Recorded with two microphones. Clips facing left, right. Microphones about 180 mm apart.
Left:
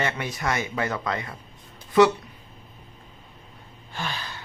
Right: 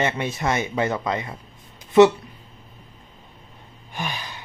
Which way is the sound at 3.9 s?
15° right (ahead or behind).